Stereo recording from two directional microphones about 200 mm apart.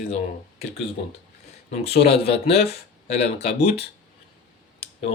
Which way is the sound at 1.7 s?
30° left (ahead or behind).